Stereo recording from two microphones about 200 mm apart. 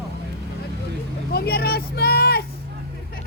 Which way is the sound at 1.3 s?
50° left (ahead or behind).